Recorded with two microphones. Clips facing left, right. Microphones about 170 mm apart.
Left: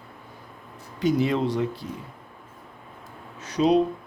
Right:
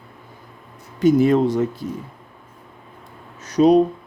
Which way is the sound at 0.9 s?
50° right (ahead or behind).